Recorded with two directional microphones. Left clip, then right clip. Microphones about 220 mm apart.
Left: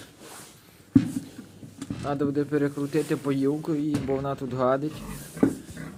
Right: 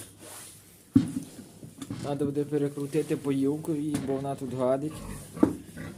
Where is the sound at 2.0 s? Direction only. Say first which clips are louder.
Left 3 dB; 5° right (ahead or behind).